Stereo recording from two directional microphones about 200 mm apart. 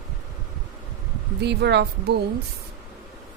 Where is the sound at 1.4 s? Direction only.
55° right (ahead or behind).